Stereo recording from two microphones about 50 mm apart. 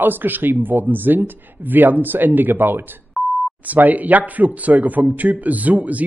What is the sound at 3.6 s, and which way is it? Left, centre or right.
A man's voice, right.